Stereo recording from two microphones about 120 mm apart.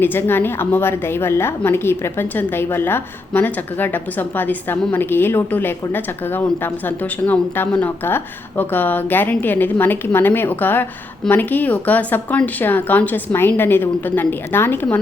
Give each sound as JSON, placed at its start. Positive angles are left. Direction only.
{"t": 0.0, "sound": "a woman's voice", "side_deg": 15}